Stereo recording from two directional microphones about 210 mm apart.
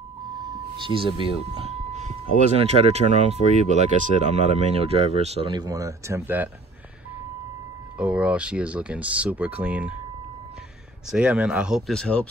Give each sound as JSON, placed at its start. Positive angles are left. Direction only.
{"t": 0.4, "sound": "speech", "side_deg": -20}
{"t": 8.0, "sound": "speech", "side_deg": -5}
{"t": 11.1, "sound": "speech", "side_deg": -5}